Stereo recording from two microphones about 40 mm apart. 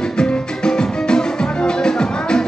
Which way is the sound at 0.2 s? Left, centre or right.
Centre.